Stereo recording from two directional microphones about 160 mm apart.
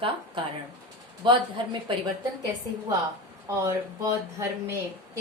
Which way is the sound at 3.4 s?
15° right (ahead or behind).